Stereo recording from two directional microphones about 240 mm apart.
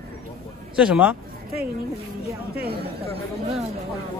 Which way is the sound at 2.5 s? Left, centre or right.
Right.